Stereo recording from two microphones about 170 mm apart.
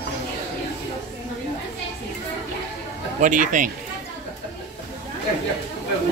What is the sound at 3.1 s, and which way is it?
Dishes, 50° right (ahead or behind).